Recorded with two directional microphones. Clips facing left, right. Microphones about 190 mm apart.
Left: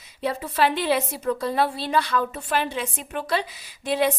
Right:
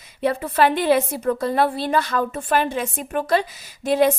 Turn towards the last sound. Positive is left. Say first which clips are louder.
# right 5 dB
turn(degrees=-45)  # may be behind; listen again after turning